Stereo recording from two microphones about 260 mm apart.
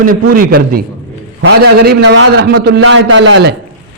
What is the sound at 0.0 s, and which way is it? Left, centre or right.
A man's voice, right.